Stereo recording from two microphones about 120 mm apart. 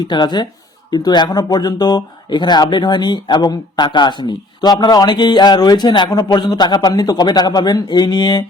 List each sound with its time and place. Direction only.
0.0 s speech: 40° left (ahead or behind)